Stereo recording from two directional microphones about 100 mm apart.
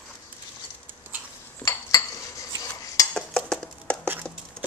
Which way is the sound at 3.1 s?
10° left (ahead or behind).